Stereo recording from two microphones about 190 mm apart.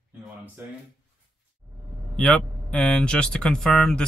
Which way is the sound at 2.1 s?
5° left (ahead or behind).